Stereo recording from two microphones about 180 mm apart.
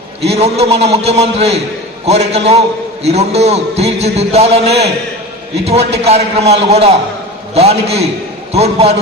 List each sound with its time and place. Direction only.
0.2 s a man's voice: 35° right (ahead or behind)